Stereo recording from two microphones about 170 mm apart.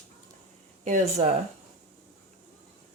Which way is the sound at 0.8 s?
40° right (ahead or behind).